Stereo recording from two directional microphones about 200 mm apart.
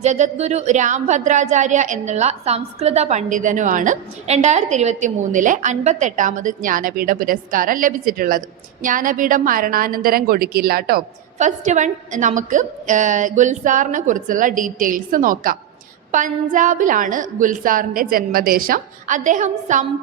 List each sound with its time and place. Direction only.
0.0 s speech: 35° right (ahead or behind)